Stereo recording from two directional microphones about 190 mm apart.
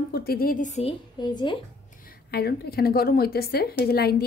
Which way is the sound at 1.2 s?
20° left (ahead or behind).